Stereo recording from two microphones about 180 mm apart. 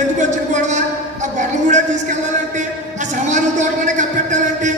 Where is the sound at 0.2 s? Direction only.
40° right (ahead or behind).